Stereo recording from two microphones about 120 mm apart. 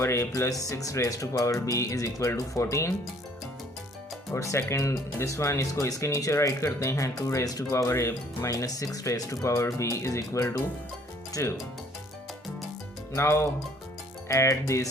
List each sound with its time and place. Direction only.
0.0 s speech: 25° left (ahead or behind)
4.3 s speech: 25° left (ahead or behind)
13.1 s speech: 20° left (ahead or behind)